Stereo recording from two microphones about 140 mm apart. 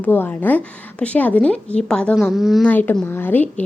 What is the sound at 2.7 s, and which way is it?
Speech, 10° left (ahead or behind).